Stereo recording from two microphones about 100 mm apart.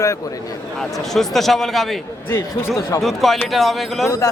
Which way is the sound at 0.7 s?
5° left (ahead or behind).